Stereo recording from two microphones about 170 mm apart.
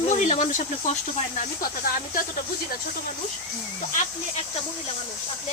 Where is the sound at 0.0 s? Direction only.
40° left (ahead or behind).